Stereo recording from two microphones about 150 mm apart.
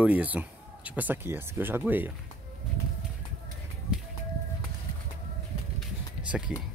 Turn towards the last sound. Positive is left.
turn(degrees=-5)  # may be behind; listen again after turning